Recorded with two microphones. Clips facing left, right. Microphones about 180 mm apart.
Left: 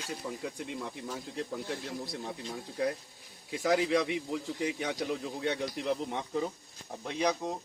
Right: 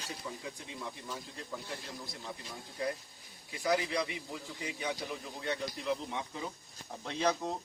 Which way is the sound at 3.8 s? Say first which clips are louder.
Left 7 dB; 80° left.